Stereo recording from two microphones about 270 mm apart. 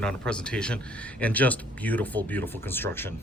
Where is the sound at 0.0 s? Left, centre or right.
Centre.